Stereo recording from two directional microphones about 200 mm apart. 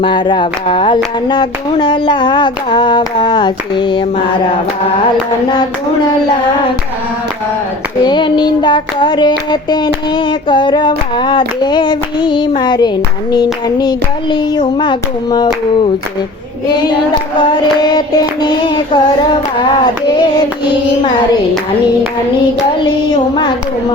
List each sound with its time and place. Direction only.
0.0 s child singing: 25° left (ahead or behind)
8.0 s child singing: 20° left (ahead or behind)
17.3 s child singing: 20° left (ahead or behind)
23.3 s child singing: 20° left (ahead or behind)